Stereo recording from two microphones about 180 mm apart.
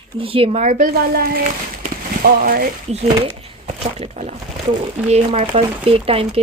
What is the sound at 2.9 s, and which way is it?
Speech, 40° right (ahead or behind).